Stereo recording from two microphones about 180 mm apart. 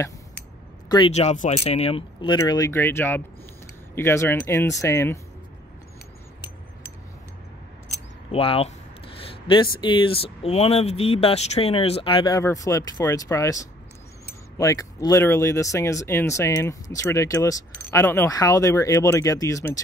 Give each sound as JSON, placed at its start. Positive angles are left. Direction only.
{"t": 0.8, "sound": "speech", "side_deg": 25}
{"t": 1.1, "sound": "speech", "side_deg": 40}
{"t": 2.3, "sound": "speech", "side_deg": 20}
{"t": 8.3, "sound": "speech", "side_deg": 30}
{"t": 9.2, "sound": "a sound", "side_deg": 25}
{"t": 9.8, "sound": "speech", "side_deg": 25}
{"t": 12.4, "sound": "speech", "side_deg": 15}